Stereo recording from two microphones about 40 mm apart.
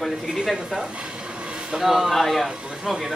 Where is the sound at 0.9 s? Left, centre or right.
Right.